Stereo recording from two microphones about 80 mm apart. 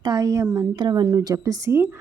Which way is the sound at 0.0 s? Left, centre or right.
Right.